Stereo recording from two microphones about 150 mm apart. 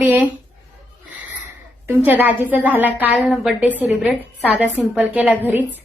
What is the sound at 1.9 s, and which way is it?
A woman's voice, 10° right (ahead or behind).